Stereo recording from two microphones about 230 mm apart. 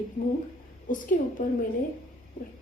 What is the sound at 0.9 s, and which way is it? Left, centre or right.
Speech, left.